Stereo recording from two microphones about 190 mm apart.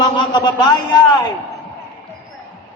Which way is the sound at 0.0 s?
20° left (ahead or behind).